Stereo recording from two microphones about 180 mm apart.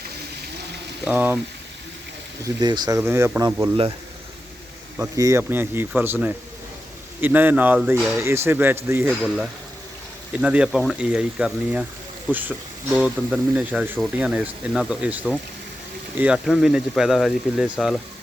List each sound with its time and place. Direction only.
1.0 s speech: 10° right (ahead or behind)
2.4 s speech: 25° right (ahead or behind)
3.0 s speech: 10° right (ahead or behind)
4.9 s speech: 15° right (ahead or behind); by 18.0 s centre (ahead or behind)